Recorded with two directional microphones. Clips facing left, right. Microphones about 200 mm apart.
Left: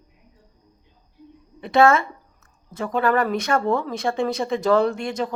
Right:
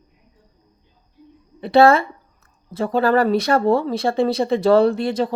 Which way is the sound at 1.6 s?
35° right (ahead or behind).